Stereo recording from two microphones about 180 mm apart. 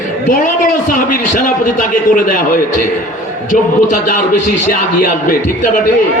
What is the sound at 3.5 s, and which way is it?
Speech, 45° left (ahead or behind).